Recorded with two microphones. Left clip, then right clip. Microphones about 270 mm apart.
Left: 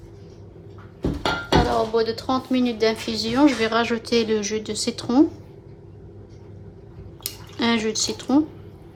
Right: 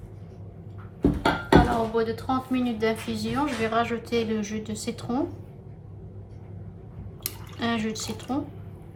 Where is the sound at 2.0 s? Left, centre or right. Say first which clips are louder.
Left 4 dB; left.